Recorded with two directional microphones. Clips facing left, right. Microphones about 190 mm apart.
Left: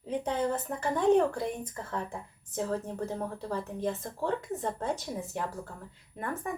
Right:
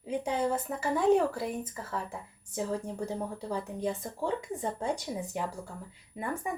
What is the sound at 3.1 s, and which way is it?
A woman's voice, 15° right (ahead or behind).